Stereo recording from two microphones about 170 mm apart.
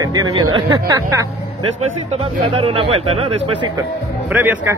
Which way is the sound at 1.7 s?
40° right (ahead or behind).